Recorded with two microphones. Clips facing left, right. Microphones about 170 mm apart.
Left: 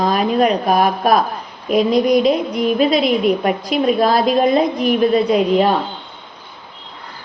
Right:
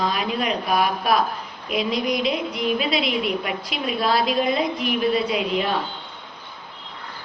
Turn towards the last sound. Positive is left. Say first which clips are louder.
# left 9 dB
turn(degrees=45)  # may be behind; listen again after turning